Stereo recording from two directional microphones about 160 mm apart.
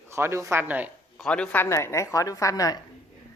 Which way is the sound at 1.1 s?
5° left (ahead or behind).